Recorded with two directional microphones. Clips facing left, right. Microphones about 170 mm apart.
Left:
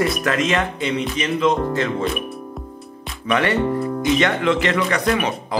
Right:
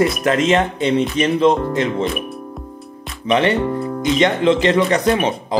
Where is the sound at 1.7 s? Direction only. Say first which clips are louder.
Right 3 dB; 20° right (ahead or behind).